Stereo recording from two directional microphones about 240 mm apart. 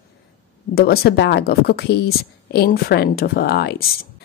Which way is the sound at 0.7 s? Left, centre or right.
Left.